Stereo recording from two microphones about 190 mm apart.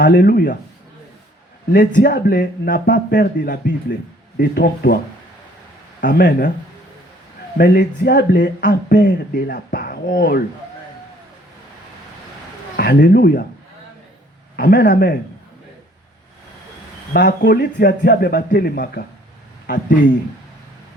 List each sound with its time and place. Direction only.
0.0 s speech: 50° left (ahead or behind)
1.7 s speech: 55° left (ahead or behind)
6.0 s speech: 50° left (ahead or behind)
7.6 s speech: 55° left (ahead or behind)
12.7 s speech: 60° left (ahead or behind)
14.5 s speech: 60° left (ahead or behind)
17.2 s speech: 55° left (ahead or behind)